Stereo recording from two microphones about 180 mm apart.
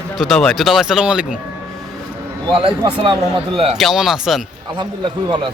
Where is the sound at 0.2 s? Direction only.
Centre (ahead or behind).